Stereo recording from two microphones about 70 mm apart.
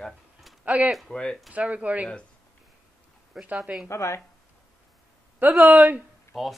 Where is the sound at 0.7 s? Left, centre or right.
Centre.